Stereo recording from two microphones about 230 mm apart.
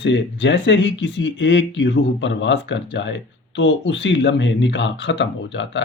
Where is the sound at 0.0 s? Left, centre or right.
Left.